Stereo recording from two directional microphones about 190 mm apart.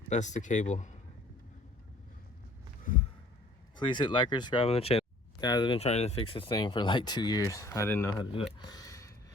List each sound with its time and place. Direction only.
0.1 s speech: 40° left (ahead or behind)
3.8 s speech: 25° left (ahead or behind)
8.2 s speech: 30° left (ahead or behind)
8.5 s a sound: 20° left (ahead or behind)